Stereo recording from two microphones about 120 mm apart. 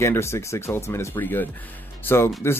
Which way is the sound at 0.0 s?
20° left (ahead or behind).